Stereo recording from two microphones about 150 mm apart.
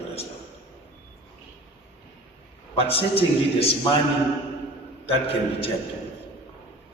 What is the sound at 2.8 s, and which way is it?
A man's voice, 40° left (ahead or behind).